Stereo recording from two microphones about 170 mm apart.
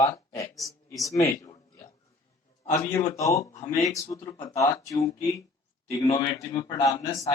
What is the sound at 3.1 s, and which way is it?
A man's voice, 20° left (ahead or behind).